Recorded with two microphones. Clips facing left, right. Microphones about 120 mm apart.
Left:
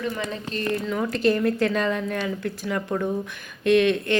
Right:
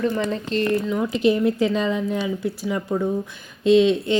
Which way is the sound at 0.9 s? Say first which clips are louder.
Right 2 dB; 10° right (ahead or behind).